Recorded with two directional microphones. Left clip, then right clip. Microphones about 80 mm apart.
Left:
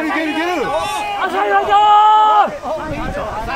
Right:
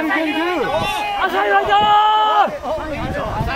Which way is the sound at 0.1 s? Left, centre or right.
Right.